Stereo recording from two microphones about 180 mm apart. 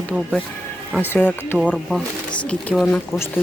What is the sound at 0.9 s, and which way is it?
Speech, 10° left (ahead or behind).